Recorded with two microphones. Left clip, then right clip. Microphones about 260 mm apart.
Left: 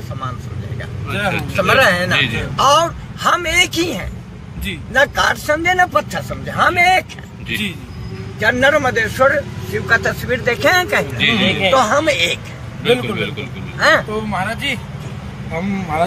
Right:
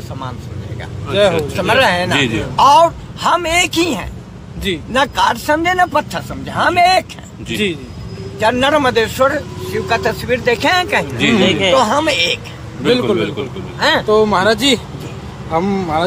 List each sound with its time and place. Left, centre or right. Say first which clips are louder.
1.2 s speech: right 3 dB; centre
13.9 s speech: right 6 dB; right